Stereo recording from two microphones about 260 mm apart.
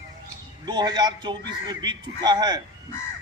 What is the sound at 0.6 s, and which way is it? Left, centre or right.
A man's voice, centre.